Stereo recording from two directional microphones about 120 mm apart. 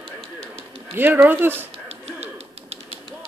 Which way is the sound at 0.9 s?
15° right (ahead or behind).